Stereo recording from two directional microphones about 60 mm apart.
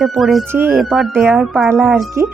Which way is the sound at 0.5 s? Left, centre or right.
Right.